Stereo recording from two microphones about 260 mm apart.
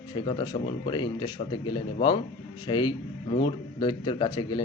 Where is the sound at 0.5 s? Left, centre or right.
Left.